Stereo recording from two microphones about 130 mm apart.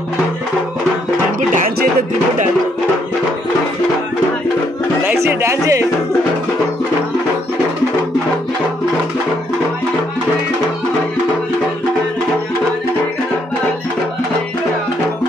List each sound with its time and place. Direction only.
5.0 s speech: 20° right (ahead or behind)